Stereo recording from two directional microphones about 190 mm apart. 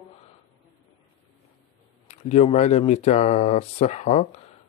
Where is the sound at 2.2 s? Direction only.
35° left (ahead or behind).